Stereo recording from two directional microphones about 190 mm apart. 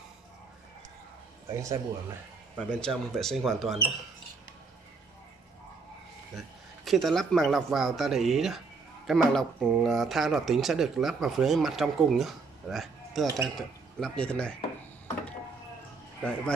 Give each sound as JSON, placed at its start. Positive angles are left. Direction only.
{"t": 1.5, "sound": "speech", "side_deg": -15}
{"t": 2.7, "sound": "speech", "side_deg": 5}
{"t": 6.3, "sound": "speech", "side_deg": 0}
{"t": 16.2, "sound": "speech", "side_deg": 5}